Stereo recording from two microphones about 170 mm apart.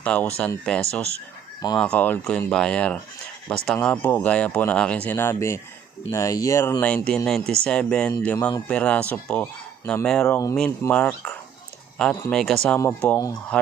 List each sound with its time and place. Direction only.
0.0 s speech: 5° left (ahead or behind)
10.2 s speech: 15° left (ahead or behind)